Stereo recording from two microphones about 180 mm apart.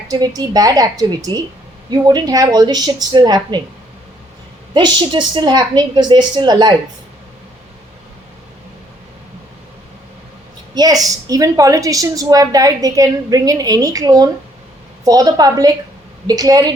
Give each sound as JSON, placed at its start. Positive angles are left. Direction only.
{"t": 0.1, "sound": "a woman's voice", "side_deg": -20}
{"t": 4.7, "sound": "a woman's voice", "side_deg": -25}
{"t": 10.8, "sound": "a woman's voice", "side_deg": -20}